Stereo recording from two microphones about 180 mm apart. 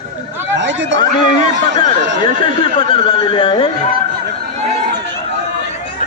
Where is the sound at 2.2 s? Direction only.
30° left (ahead or behind).